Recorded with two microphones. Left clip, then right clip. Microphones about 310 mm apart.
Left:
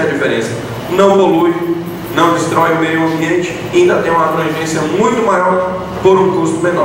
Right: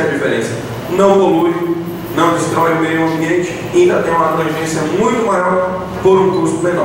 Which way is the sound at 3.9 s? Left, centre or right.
Centre.